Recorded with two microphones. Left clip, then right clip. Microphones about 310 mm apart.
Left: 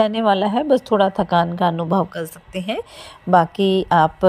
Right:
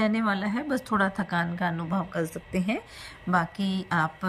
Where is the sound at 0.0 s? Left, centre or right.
Centre.